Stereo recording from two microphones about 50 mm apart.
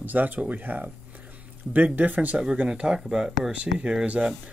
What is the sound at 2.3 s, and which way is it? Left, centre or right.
Speech, centre.